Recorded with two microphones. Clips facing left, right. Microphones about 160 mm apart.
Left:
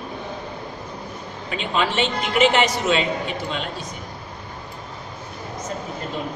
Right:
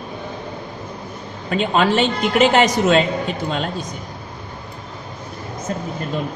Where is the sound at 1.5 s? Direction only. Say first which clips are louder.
Right 6 dB; 45° right (ahead or behind).